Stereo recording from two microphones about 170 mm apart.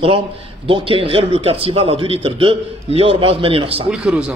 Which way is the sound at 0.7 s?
30° right (ahead or behind).